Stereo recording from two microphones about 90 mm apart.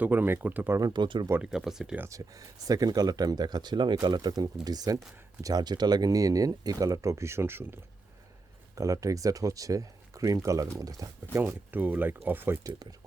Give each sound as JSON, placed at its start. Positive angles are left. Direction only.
{"t": 0.0, "sound": "speech", "side_deg": -20}
{"t": 0.8, "sound": "speech", "side_deg": -45}
{"t": 1.0, "sound": "speech", "side_deg": -65}
{"t": 1.4, "sound": "speech", "side_deg": -5}
{"t": 2.0, "sound": "speech", "side_deg": -40}
{"t": 8.7, "sound": "speech", "side_deg": -40}
{"t": 11.4, "sound": "speech", "side_deg": -20}